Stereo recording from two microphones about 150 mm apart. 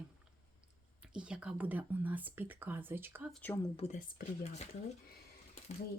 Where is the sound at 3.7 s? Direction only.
50° left (ahead or behind).